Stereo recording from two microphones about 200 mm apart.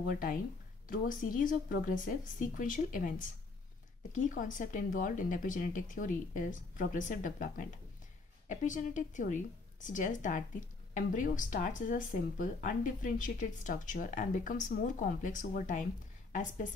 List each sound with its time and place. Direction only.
0.1 s speech: 45° left (ahead or behind)